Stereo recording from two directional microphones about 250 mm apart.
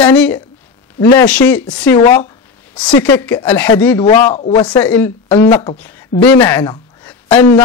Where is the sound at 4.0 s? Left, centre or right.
Left.